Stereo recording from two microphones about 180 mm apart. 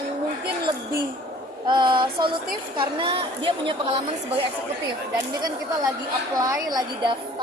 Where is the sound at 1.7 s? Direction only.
25° right (ahead or behind).